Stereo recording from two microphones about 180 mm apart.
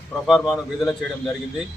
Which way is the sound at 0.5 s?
Centre (ahead or behind).